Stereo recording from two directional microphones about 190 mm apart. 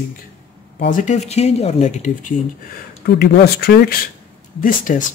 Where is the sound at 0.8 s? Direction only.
40° left (ahead or behind).